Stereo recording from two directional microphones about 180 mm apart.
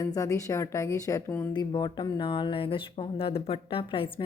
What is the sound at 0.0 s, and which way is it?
A woman's voice, 20° left (ahead or behind).